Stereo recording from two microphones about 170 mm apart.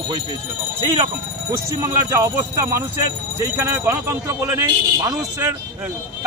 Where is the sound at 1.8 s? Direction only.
15° right (ahead or behind).